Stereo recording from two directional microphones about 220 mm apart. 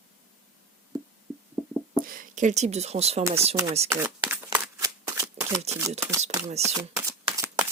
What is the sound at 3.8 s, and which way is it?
Shuffling cards, 10° right (ahead or behind).